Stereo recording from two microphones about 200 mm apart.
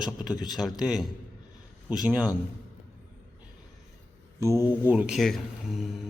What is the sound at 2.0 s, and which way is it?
Speech, 5° right (ahead or behind).